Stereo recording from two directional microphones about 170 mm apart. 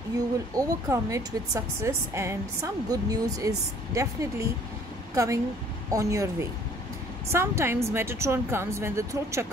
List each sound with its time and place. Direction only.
0.6 s a woman's voice: 20° right (ahead or behind)